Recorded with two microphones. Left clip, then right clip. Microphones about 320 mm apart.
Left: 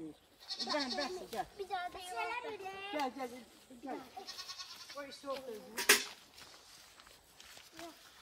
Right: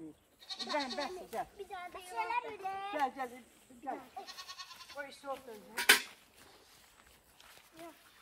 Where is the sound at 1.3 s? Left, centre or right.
Centre.